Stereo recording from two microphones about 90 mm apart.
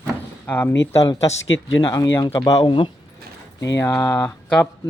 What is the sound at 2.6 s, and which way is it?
Speech, 65° left (ahead or behind).